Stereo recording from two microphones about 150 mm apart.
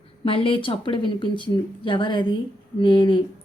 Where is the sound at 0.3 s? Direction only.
35° left (ahead or behind).